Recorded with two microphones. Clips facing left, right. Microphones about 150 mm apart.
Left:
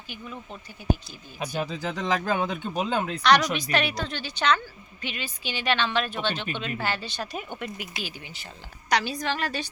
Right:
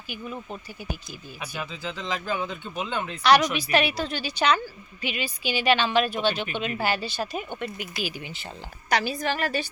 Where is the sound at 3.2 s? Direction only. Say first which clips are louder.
Right 3 dB; 5° right (ahead or behind).